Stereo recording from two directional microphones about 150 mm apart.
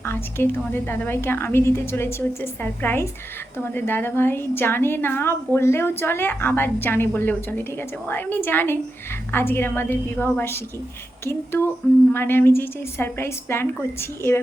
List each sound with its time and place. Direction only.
0.0 s a woman's voice: 15° left (ahead or behind)